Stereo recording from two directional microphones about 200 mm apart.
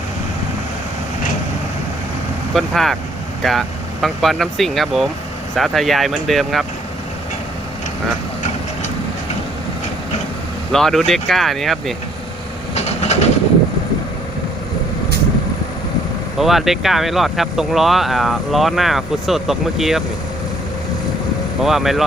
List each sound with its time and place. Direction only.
2.5 s speech: centre (ahead or behind)
10.7 s speech: centre (ahead or behind)
12.7 s train: 35° left (ahead or behind)
16.4 s speech: centre (ahead or behind)
21.6 s speech: centre (ahead or behind)